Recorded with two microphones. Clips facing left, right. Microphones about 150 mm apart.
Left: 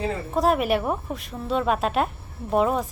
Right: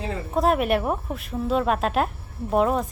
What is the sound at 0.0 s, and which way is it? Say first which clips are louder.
Speech: even; centre (ahead or behind).